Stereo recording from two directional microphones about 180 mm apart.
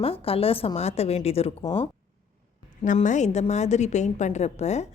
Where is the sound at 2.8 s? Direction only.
45° left (ahead or behind).